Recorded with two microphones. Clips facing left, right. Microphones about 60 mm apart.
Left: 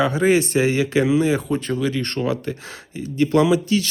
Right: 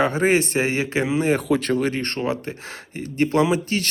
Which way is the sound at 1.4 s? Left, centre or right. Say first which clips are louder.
Right 2 dB; right.